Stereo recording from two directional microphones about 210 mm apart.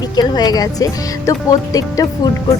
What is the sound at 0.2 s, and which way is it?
Speech, 20° left (ahead or behind).